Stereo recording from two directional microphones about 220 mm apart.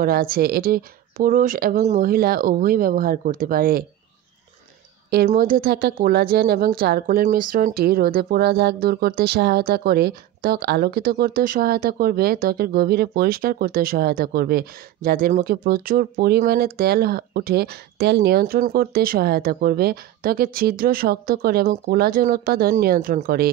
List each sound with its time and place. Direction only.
0.0 s speech: 40° right (ahead or behind)
5.1 s speech: 40° right (ahead or behind)